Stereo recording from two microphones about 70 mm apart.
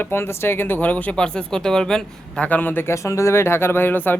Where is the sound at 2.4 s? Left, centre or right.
Left.